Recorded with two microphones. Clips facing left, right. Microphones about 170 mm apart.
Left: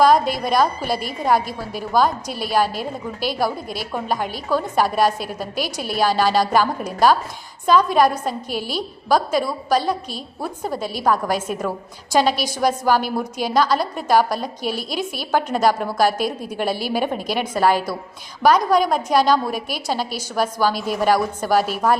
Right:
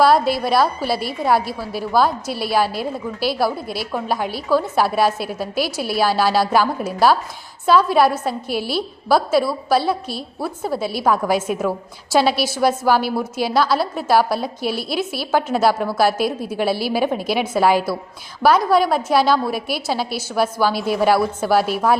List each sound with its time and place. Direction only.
0.0 s a woman's voice: 5° right (ahead or behind)
14.7 s a woman's voice: 45° left (ahead or behind)
15.3 s a woman's voice: 5° right (ahead or behind)